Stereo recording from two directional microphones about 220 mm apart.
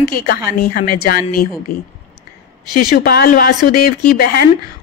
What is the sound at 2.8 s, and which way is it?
Speech, 45° left (ahead or behind).